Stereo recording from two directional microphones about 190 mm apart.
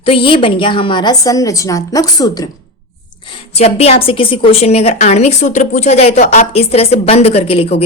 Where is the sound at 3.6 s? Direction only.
35° left (ahead or behind).